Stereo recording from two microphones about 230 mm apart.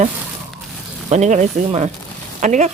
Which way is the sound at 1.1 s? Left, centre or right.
Right.